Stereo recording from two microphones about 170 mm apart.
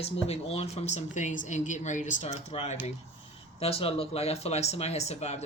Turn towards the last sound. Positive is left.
turn(degrees=40)  # may be behind; listen again after turning